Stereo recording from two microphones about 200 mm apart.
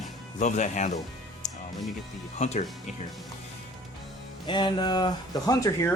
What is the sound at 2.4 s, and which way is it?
Speech, 35° left (ahead or behind).